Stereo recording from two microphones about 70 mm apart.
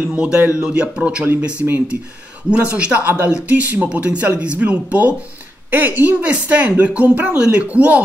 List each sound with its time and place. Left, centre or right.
0.0 s speech: centre